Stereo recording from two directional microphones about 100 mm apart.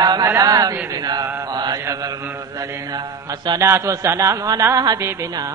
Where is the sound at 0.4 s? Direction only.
40° right (ahead or behind).